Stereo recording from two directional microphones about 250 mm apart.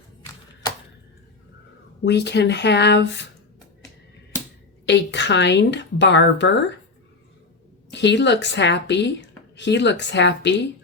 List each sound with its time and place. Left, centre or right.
2.0 s a woman's voice: left
4.9 s a woman's voice: left
7.9 s a woman's voice: left